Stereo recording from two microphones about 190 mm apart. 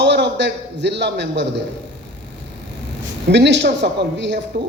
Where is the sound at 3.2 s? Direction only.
65° right (ahead or behind).